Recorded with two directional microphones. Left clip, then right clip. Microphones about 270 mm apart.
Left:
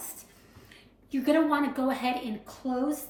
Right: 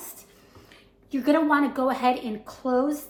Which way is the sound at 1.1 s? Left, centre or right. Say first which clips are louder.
Right 3 dB; right.